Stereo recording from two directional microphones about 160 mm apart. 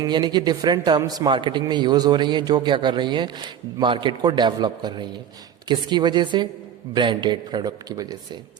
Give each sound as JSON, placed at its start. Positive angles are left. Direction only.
{"t": 0.0, "sound": "a man's voice", "side_deg": -25}